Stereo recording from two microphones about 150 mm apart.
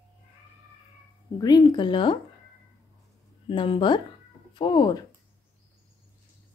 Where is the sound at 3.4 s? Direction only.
35° left (ahead or behind).